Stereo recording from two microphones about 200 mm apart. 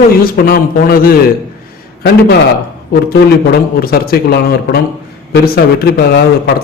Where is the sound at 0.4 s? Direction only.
50° left (ahead or behind).